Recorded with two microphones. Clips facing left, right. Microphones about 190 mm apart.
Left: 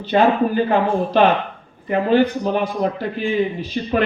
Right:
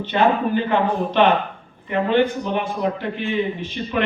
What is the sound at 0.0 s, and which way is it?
Speech, 40° left (ahead or behind).